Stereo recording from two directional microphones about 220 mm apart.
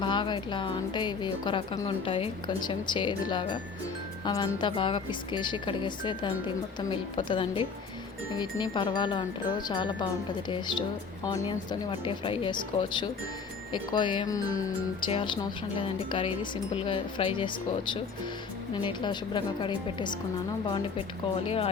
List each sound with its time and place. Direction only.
0.0 s speech: 20° left (ahead or behind)
11.3 s speech: 20° left (ahead or behind)